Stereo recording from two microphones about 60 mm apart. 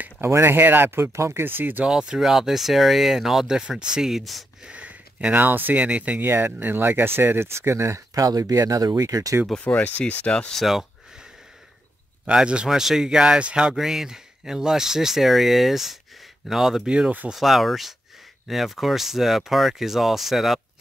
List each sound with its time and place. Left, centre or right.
0.3 s speech: right
1.9 s speech: centre
4.6 s speech: right
6.2 s speech: right
9.6 s speech: left
10.5 s speech: centre
12.3 s speech: centre
12.6 s speech: centre